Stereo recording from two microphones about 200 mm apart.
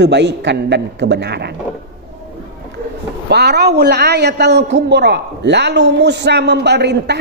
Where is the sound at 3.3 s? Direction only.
55° right (ahead or behind).